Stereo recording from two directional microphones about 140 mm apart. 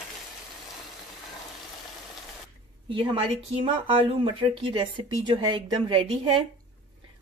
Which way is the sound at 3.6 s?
40° right (ahead or behind).